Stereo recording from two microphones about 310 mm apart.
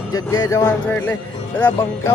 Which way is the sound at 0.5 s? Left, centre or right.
Centre.